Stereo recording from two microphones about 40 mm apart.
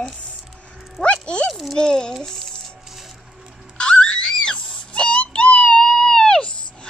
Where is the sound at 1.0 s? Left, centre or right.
Left.